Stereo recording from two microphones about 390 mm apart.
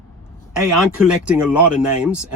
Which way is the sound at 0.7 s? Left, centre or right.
Centre.